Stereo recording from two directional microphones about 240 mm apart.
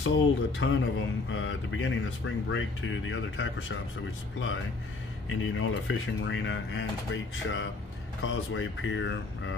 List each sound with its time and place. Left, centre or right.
0.0 s speech: left
5.3 s speech: left
8.2 s speech: left